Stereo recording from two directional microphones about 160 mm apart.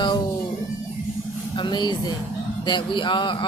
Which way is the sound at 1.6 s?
25° left (ahead or behind).